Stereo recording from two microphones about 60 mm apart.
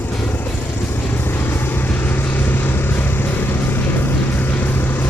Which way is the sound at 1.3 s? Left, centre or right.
Left.